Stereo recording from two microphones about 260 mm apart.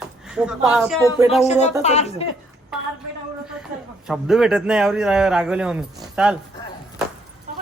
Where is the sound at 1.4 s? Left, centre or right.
Left.